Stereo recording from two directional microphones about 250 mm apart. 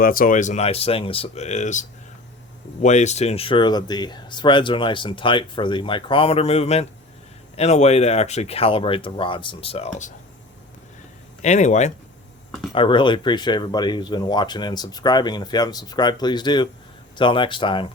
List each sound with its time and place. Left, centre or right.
0.0 s speech: left
11.4 s speech: left